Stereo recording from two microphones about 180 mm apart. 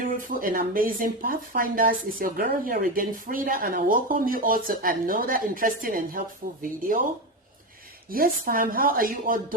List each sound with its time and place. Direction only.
0.1 s speech: 50° right (ahead or behind)
8.1 s speech: 50° right (ahead or behind)